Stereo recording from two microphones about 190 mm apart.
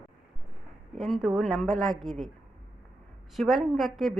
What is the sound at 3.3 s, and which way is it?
Speech, centre (ahead or behind).